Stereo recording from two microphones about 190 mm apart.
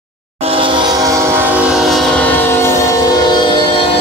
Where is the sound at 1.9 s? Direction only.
Centre (ahead or behind).